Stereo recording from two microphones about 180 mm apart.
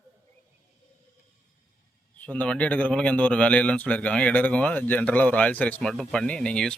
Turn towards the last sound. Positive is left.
turn(degrees=5)  # may be behind; listen again after turning